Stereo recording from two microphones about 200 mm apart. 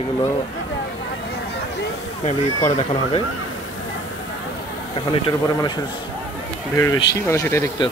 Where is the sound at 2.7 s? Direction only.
40° left (ahead or behind).